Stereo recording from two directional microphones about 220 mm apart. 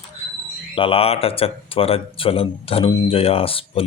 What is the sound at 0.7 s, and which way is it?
Speech, 25° left (ahead or behind).